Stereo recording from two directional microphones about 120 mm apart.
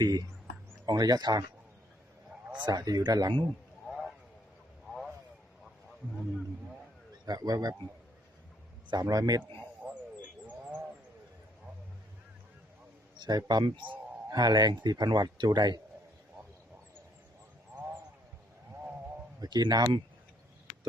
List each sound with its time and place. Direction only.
0.0 s speech: 35° right (ahead or behind)
2.5 s speech: 40° right (ahead or behind)
3.8 s a sound: centre (ahead or behind)
4.9 s vehicle: centre (ahead or behind)
7.3 s speech: 30° right (ahead or behind)
8.9 s speech: 35° right (ahead or behind)
13.1 s speech: 35° right (ahead or behind)
19.4 s speech: 35° right (ahead or behind)